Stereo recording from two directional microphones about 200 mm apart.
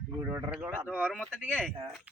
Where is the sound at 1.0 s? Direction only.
5° left (ahead or behind).